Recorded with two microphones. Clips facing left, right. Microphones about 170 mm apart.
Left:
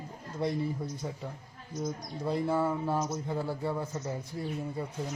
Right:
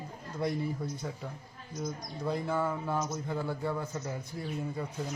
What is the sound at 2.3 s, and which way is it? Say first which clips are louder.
A man's voice: left 3 dB; 30° left (ahead or behind).